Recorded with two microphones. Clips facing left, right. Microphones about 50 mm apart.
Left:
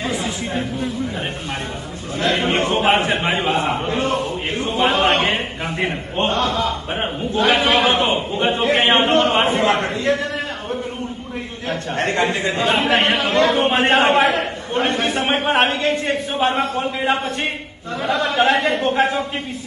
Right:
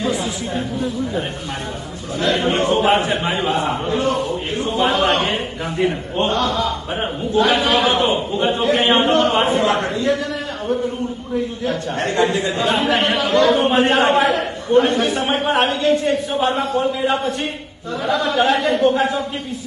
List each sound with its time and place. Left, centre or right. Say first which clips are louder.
0.0 s a man's voice: right 2 dB; left
11.3 s a man's voice: right 5 dB; left